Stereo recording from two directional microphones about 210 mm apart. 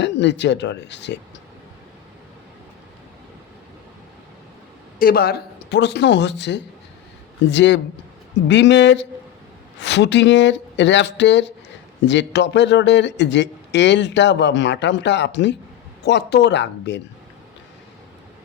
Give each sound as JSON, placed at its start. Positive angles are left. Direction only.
{"t": 0.0, "sound": "speech", "side_deg": 55}
{"t": 4.9, "sound": "speech", "side_deg": 45}